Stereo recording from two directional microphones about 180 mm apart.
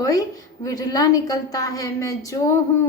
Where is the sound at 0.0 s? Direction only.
20° left (ahead or behind).